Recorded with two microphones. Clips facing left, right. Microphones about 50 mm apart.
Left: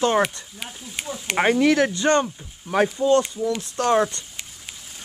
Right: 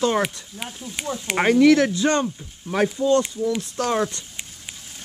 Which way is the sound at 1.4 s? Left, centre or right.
Centre.